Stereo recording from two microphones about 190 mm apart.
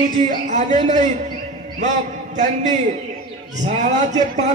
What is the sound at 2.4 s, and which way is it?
A man's voice, 40° right (ahead or behind).